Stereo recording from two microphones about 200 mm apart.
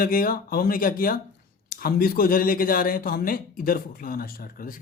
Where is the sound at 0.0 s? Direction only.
45° left (ahead or behind).